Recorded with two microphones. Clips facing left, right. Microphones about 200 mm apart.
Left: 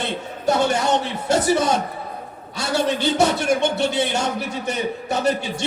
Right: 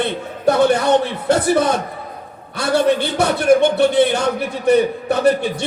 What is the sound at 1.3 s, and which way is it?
A man's voice, 55° right (ahead or behind).